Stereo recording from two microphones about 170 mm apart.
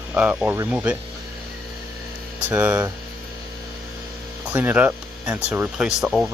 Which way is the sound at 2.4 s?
10° right (ahead or behind).